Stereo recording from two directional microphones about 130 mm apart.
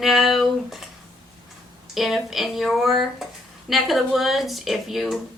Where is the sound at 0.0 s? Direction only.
Centre (ahead or behind).